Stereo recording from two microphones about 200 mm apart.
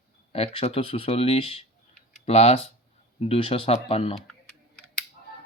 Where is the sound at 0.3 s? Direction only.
30° left (ahead or behind).